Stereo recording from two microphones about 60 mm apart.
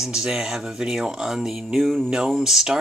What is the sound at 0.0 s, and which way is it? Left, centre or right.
Speech, centre.